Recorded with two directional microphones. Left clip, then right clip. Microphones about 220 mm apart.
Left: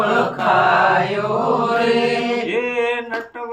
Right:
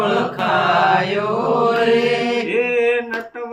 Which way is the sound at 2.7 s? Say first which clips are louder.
Right 6 dB; 10° left (ahead or behind).